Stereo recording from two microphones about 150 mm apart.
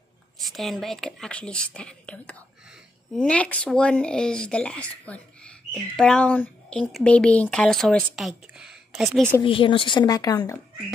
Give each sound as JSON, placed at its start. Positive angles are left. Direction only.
{"t": 0.5, "sound": "speech", "side_deg": 0}
{"t": 9.4, "sound": "a woman's voice", "side_deg": 35}